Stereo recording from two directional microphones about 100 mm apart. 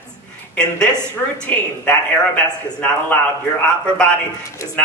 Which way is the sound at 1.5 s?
15° left (ahead or behind).